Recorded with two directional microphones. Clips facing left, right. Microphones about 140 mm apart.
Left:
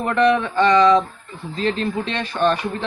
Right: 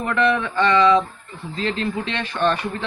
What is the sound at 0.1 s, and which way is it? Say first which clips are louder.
Speech: left 3 dB; 20° left (ahead or behind).